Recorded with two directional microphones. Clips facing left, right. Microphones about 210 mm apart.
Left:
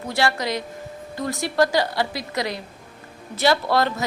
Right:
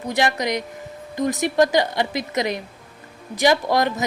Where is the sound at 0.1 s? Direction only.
20° right (ahead or behind).